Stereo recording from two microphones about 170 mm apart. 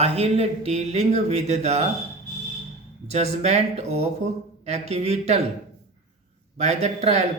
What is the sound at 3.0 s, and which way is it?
Speech, 40° right (ahead or behind).